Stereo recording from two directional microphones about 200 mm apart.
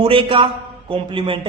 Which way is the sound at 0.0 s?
25° right (ahead or behind).